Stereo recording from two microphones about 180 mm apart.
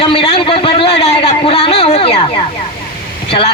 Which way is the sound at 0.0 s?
30° left (ahead or behind).